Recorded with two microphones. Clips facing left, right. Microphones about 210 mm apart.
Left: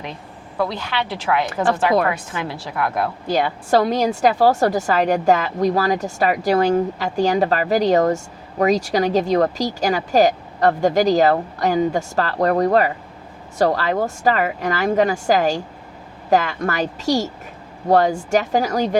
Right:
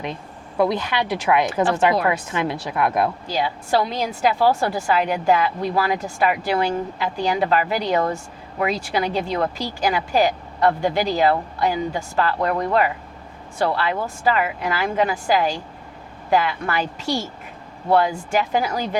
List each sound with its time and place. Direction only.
0.6 s a woman's voice: 20° right (ahead or behind)
3.2 s a woman's voice: 50° left (ahead or behind)